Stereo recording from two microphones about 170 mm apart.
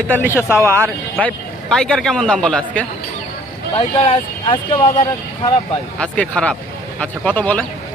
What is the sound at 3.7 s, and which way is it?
Speech, 35° left (ahead or behind).